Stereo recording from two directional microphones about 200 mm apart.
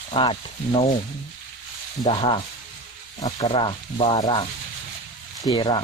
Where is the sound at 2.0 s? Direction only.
25° left (ahead or behind).